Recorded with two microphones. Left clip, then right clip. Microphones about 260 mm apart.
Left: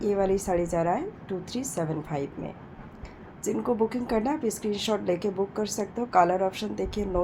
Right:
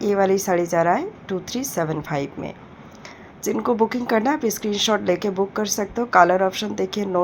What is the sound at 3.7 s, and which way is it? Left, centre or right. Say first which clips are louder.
A woman's voice: right 7 dB; centre.